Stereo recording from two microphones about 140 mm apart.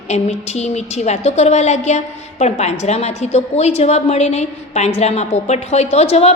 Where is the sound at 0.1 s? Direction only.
50° left (ahead or behind).